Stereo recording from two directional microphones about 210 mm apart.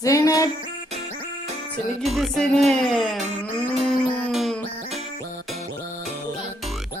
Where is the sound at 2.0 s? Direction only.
Centre (ahead or behind).